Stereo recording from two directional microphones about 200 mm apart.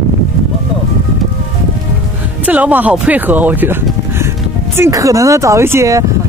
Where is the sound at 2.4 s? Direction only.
10° right (ahead or behind).